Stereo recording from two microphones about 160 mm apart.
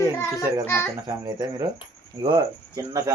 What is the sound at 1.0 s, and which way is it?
Speech, 25° right (ahead or behind).